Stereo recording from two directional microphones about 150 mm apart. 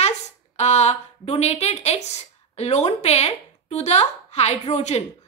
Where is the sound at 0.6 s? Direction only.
45° left (ahead or behind).